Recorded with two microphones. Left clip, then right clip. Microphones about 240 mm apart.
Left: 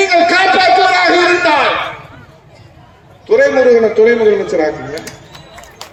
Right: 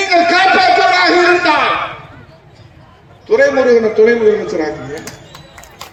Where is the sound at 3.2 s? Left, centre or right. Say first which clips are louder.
Left 1 dB; centre.